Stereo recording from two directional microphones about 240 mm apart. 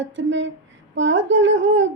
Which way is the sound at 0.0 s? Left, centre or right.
Right.